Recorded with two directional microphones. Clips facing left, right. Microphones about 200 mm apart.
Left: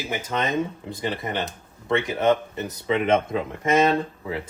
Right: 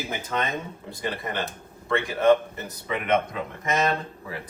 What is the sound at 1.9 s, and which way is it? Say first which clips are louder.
Speech: right 1 dB; 20° left (ahead or behind).